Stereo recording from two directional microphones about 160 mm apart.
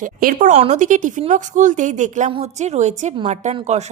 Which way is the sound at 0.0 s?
60° right (ahead or behind).